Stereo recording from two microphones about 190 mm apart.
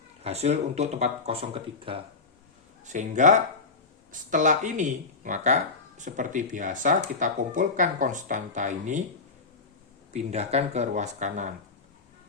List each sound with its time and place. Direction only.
0.2 s speech: 35° right (ahead or behind)
2.8 s speech: 40° right (ahead or behind)
10.1 s speech: 35° right (ahead or behind)